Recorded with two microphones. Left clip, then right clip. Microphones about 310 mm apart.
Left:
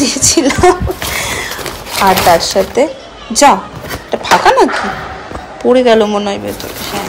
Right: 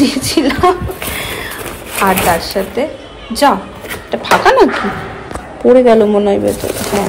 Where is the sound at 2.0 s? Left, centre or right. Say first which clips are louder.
Left 4 dB; centre.